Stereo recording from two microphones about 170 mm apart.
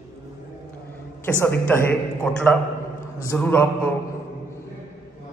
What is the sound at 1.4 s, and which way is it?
A man's voice, 10° left (ahead or behind).